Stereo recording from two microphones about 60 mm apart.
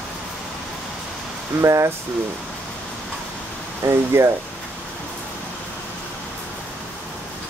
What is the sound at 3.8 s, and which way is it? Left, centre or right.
Speech, right.